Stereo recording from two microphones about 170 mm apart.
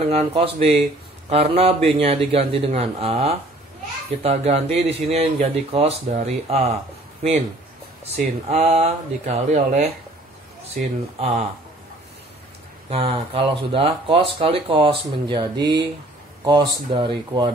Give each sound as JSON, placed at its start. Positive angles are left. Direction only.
{"t": 0.0, "sound": "speech", "side_deg": -35}
{"t": 8.0, "sound": "speech", "side_deg": -40}
{"t": 12.9, "sound": "speech", "side_deg": -35}